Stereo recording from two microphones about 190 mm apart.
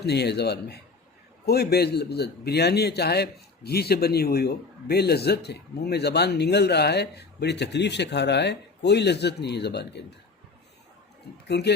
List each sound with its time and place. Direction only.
0.0 s a man's voice: 60° left (ahead or behind)
11.4 s speech: 60° left (ahead or behind)